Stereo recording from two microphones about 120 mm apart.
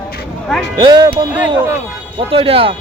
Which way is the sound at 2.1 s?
50° right (ahead or behind).